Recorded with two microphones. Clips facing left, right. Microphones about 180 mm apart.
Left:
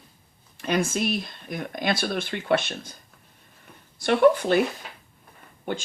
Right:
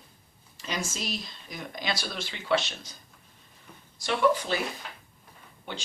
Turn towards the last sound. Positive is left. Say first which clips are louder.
# left 9 dB
turn(degrees=50)  # may be behind; listen again after turning